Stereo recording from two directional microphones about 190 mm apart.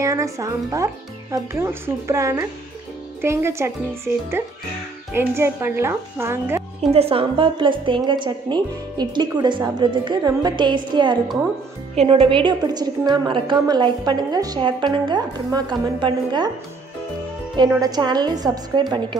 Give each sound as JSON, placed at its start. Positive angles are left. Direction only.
{"t": 0.0, "sound": "speech", "side_deg": -15}
{"t": 6.9, "sound": "a woman's voice", "side_deg": -30}
{"t": 17.8, "sound": "a woman's voice", "side_deg": -20}